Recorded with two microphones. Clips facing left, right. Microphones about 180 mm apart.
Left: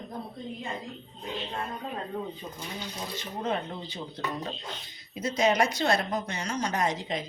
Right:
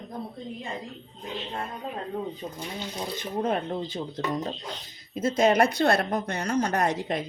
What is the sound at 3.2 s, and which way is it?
Speech, 50° right (ahead or behind).